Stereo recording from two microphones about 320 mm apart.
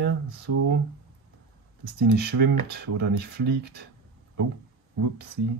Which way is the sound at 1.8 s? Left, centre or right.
Right.